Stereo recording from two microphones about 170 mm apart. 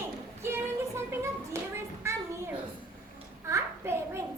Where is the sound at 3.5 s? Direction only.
15° right (ahead or behind).